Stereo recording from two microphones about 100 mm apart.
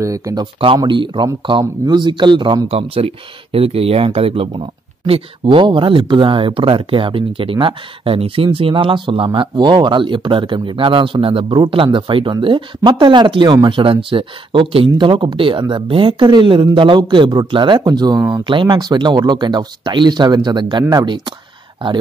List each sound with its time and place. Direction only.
0.0 s speech: 35° right (ahead or behind)
0.4 s speech: 60° right (ahead or behind)
2.7 s speech: 75° right (ahead or behind); by 18.2 s 45° right (ahead or behind)
18.4 s speech: 55° right (ahead or behind)